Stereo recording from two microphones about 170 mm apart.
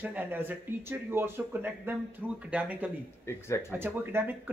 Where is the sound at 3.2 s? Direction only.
15° left (ahead or behind).